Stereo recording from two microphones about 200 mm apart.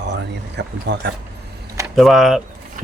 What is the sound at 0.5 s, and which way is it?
Speech, 60° right (ahead or behind).